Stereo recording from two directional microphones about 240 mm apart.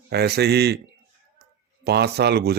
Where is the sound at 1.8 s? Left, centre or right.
Right.